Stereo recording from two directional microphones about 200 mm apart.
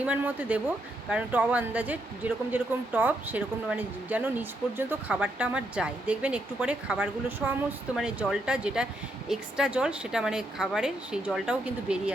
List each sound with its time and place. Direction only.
0.0 s a woman's voice: 5° right (ahead or behind)